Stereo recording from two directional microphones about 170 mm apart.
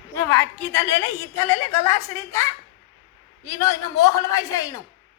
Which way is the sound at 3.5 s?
20° left (ahead or behind).